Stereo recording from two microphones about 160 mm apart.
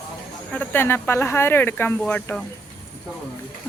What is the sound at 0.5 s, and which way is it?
Speech, 10° left (ahead or behind).